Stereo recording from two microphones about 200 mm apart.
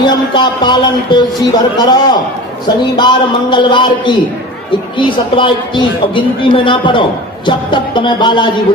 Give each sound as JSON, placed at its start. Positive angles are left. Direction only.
{"t": 0.1, "sound": "speech", "side_deg": 20}